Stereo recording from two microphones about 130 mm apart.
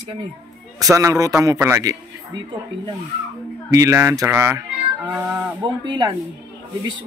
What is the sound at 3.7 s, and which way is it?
Speech, 25° right (ahead or behind).